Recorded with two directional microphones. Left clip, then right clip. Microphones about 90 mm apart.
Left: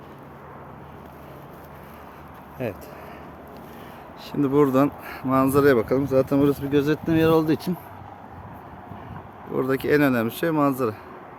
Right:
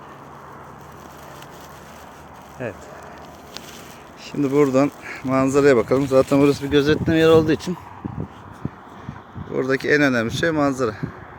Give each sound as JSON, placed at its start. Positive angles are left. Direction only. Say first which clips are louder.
{"t": 2.6, "sound": "speech", "louder": "even", "side_deg": 45}
{"t": 4.3, "sound": "speech", "louder": "right 2 dB", "side_deg": 0}
{"t": 5.7, "sound": "speech", "louder": "right 4 dB", "side_deg": -25}
{"t": 6.5, "sound": "speech", "louder": "right 4 dB", "side_deg": -15}
{"t": 9.5, "sound": "speech", "louder": "right 3 dB", "side_deg": -5}